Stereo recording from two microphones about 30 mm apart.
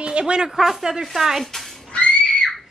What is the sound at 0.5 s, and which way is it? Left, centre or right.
Speech, centre.